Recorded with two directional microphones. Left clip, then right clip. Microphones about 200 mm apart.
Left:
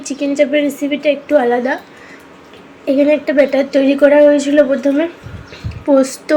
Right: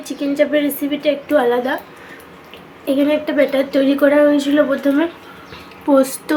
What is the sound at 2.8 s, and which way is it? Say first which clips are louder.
A woman's voice: left 4 dB; 10° left (ahead or behind).